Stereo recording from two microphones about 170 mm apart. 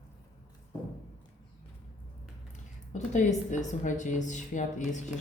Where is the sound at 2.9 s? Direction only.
45° left (ahead or behind).